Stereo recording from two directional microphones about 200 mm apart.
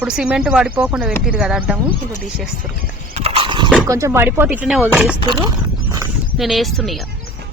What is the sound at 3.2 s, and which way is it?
Horse, 30° right (ahead or behind).